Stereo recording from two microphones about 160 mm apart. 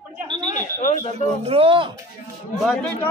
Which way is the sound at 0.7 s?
55° left (ahead or behind).